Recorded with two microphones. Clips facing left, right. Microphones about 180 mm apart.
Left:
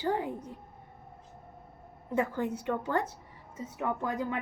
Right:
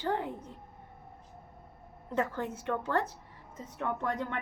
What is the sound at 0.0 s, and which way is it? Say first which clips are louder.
Speech: left 2 dB; 10° left (ahead or behind).